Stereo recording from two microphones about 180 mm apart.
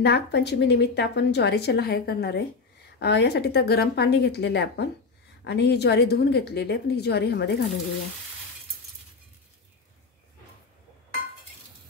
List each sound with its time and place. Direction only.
0.0 s a woman's voice: 70° left (ahead or behind)